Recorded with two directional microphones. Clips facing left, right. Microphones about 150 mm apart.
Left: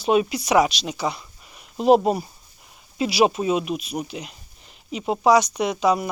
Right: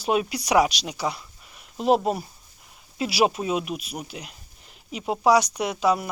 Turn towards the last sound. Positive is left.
turn(degrees=-5)  # may be behind; listen again after turning